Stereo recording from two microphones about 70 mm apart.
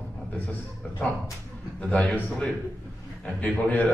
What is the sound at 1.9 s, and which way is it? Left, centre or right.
A man's voice, centre.